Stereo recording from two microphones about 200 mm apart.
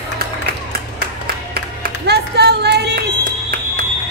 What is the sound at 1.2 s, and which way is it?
Music, 50° right (ahead or behind).